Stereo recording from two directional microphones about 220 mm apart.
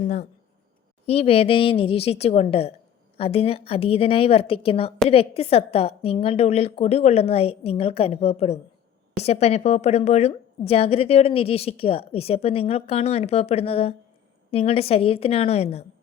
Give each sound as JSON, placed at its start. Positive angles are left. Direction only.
{"t": 1.0, "sound": "a woman's voice", "side_deg": 25}